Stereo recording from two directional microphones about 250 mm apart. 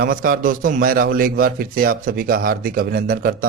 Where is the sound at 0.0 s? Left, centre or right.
Right.